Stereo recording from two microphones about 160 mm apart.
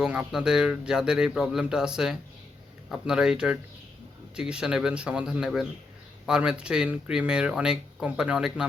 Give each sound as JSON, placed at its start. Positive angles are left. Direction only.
{"t": 0.0, "sound": "speech", "side_deg": -5}